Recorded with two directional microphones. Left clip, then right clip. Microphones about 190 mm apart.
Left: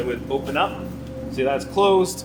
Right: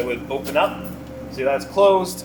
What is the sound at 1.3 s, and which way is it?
Speech, 30° left (ahead or behind).